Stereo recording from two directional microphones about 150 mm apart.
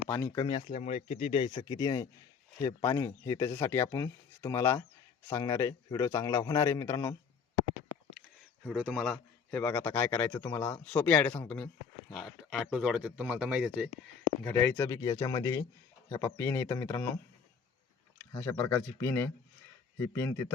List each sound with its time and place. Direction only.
0.3 s speech: 30° left (ahead or behind)
0.7 s speech: 50° left (ahead or behind); by 7.2 s 15° left (ahead or behind)
8.7 s speech: 5° right (ahead or behind)
14.4 s speech: 15° left (ahead or behind)
16.0 s speech: 15° left (ahead or behind)
18.3 s speech: 10° left (ahead or behind)